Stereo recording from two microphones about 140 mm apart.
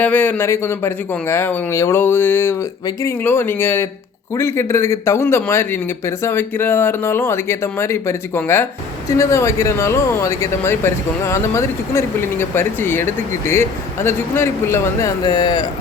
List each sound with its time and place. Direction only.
0.0 s a man's voice: 10° left (ahead or behind)
15.2 s speech: 30° left (ahead or behind)